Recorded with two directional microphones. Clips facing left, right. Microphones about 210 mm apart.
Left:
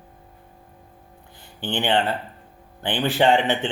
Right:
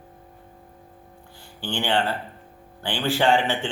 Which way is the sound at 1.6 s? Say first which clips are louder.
Left 2 dB; 20° left (ahead or behind).